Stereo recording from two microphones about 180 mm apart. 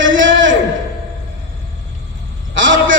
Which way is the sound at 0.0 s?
90° right.